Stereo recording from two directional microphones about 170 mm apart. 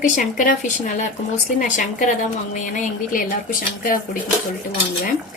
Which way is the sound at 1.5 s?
45° left (ahead or behind).